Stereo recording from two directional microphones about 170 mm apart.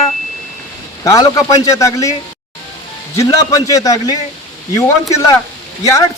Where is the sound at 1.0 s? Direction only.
20° left (ahead or behind).